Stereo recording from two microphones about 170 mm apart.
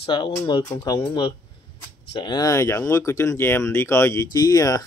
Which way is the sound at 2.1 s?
25° left (ahead or behind).